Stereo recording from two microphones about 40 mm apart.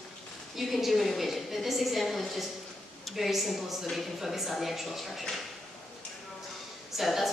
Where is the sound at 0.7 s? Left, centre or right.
Centre.